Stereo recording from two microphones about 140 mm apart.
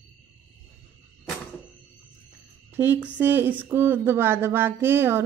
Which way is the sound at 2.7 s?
15° right (ahead or behind).